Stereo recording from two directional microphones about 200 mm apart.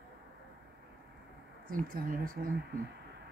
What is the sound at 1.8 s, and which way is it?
Speech, 45° right (ahead or behind).